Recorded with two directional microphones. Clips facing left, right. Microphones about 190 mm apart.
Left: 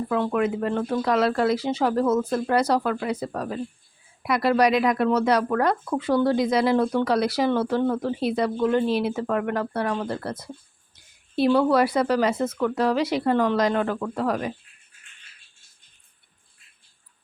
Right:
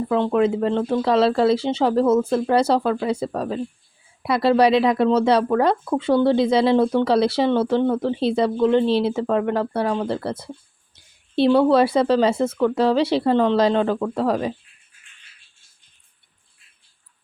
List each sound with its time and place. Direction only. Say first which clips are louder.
0.1 s speech: right 5 dB; 25° right (ahead or behind)